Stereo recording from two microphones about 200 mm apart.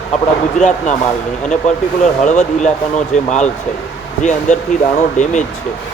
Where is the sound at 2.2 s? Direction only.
35° left (ahead or behind).